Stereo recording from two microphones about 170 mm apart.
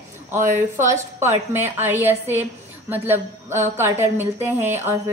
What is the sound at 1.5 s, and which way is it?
A woman's voice, 15° right (ahead or behind).